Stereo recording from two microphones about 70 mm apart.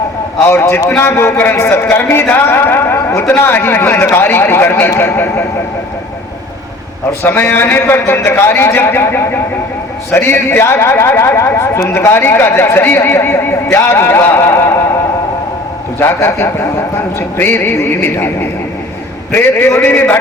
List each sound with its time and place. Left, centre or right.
0.4 s speech: left
7.2 s speech: left
16.0 s a man's voice: left